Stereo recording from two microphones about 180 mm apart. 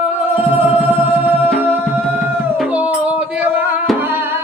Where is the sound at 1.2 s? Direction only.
10° right (ahead or behind).